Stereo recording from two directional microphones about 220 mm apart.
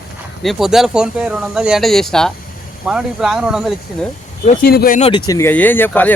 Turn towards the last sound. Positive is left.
turn(degrees=10)  # may be behind; listen again after turning